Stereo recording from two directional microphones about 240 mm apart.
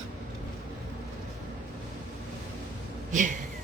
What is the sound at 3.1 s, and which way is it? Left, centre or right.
Speech, right.